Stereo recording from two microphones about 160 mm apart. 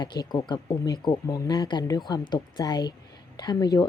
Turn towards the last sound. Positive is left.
turn(degrees=25)  # may be behind; listen again after turning